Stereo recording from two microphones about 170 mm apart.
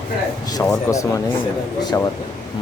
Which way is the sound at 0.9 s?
20° left (ahead or behind).